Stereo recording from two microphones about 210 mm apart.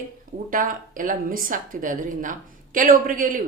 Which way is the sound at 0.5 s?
40° right (ahead or behind).